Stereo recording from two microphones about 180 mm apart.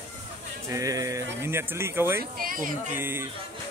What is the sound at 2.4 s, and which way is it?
Speech, 50° right (ahead or behind).